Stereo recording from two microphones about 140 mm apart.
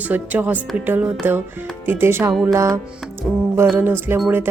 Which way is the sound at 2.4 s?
20° right (ahead or behind).